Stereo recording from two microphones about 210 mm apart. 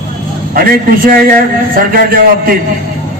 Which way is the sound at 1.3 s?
45° right (ahead or behind).